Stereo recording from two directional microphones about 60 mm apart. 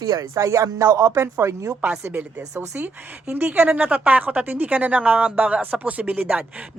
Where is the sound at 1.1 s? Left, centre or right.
Right.